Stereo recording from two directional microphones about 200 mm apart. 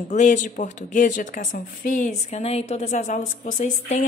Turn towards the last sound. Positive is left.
turn(degrees=40)  # may be behind; listen again after turning